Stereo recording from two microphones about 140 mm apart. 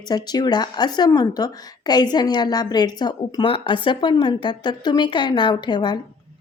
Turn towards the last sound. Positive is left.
turn(degrees=30)  # may be behind; listen again after turning